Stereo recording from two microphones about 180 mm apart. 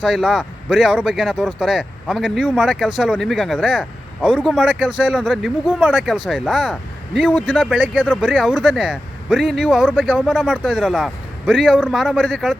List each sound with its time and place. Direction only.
0.0 s speech: 5° right (ahead or behind)
7.3 s speech: 10° left (ahead or behind)
7.6 s speech: 5° right (ahead or behind)